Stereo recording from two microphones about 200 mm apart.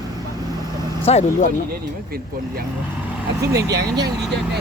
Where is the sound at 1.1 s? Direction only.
35° left (ahead or behind).